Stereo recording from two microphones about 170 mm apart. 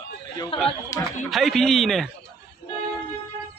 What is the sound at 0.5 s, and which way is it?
Speech, 35° left (ahead or behind).